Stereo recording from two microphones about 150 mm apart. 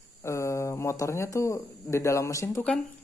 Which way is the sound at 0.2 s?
20° left (ahead or behind).